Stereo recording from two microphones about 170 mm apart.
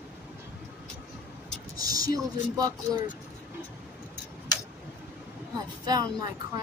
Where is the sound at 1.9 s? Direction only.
20° right (ahead or behind).